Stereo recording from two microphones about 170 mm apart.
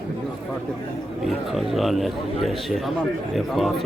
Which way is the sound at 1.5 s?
Centre (ahead or behind).